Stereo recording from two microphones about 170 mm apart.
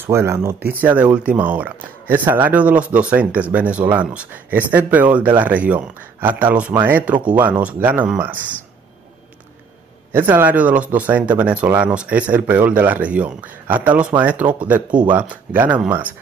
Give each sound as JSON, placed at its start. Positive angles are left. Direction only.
{"t": 0.0, "sound": "speech", "side_deg": -15}
{"t": 10.1, "sound": "speech", "side_deg": -10}